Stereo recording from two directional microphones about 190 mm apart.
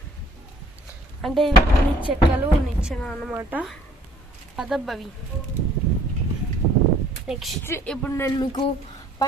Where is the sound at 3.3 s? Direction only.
10° right (ahead or behind).